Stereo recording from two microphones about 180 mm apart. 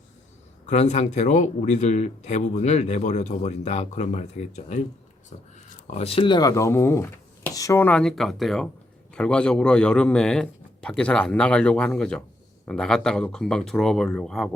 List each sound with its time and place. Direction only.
0.6 s speech: 40° left (ahead or behind)
5.9 s a man's voice: 35° left (ahead or behind); by 14.5 s 5° left (ahead or behind)